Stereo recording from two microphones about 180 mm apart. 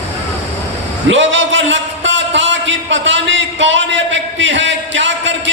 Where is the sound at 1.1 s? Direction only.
90° right.